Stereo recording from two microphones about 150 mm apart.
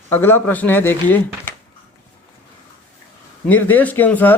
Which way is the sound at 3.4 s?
10° left (ahead or behind).